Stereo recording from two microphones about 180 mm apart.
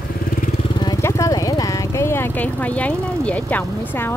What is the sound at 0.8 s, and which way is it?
Speech, 20° left (ahead or behind).